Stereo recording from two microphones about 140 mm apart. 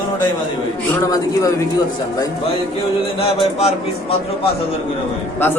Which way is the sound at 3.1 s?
45° left (ahead or behind).